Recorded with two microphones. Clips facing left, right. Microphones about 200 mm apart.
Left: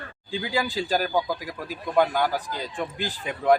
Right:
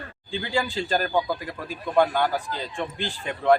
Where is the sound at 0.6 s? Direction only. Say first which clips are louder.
Even; 15° left (ahead or behind).